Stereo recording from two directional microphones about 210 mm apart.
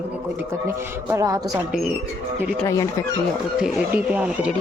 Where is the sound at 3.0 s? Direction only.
15° left (ahead or behind).